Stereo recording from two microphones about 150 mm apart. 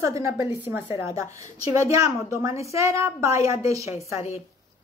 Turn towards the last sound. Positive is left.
turn(degrees=-20)  # may be behind; listen again after turning